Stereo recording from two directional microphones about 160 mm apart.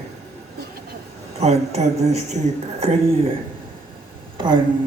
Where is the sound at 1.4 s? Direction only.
40° right (ahead or behind).